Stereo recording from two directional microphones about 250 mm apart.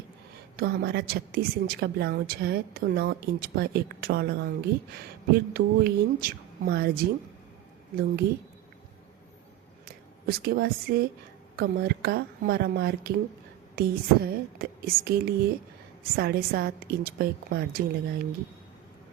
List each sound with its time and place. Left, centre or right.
0.5 s a woman's voice: right
8.2 s a woman's voice: right
9.8 s a woman's voice: right